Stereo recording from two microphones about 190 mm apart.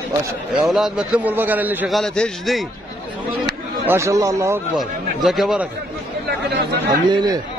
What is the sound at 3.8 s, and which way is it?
Speech, 15° right (ahead or behind).